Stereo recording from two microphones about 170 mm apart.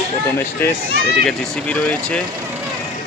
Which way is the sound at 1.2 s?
5° left (ahead or behind).